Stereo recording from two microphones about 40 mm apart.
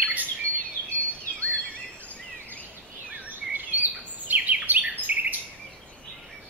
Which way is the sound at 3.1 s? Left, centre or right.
Right.